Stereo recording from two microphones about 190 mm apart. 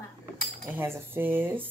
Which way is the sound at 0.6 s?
10° right (ahead or behind).